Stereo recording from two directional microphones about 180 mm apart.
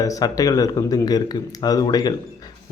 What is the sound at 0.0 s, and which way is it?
A man's voice, 20° left (ahead or behind).